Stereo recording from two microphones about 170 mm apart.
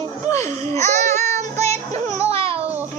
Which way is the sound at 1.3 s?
40° right (ahead or behind).